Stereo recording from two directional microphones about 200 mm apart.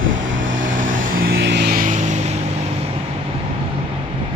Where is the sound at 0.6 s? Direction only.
40° right (ahead or behind).